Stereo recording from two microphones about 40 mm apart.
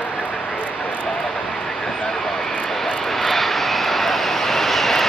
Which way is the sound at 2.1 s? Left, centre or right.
Centre.